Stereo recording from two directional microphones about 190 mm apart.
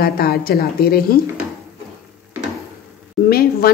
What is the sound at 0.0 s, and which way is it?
A woman's voice, 55° left (ahead or behind).